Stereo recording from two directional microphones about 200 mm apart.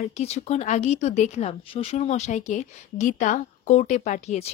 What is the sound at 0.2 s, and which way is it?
A woman's voice, 30° left (ahead or behind).